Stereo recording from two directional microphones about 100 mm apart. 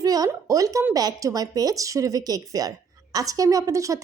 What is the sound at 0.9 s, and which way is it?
A woman's voice, 40° right (ahead or behind).